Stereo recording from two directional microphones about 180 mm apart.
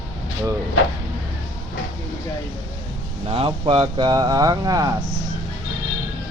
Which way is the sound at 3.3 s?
30° right (ahead or behind).